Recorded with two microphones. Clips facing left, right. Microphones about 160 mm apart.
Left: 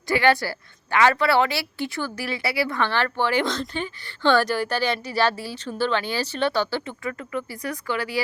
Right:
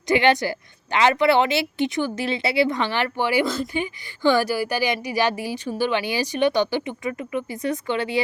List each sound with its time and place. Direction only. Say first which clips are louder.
0.1 s speech: right 2 dB; 20° right (ahead or behind)